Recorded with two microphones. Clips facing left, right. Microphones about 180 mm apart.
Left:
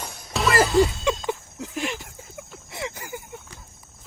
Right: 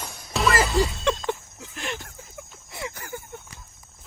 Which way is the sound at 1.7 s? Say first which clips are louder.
Left 4 dB; 5° left (ahead or behind).